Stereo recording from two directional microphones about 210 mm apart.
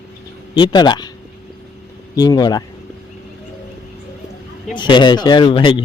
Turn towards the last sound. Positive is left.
turn(degrees=25)  # may be behind; listen again after turning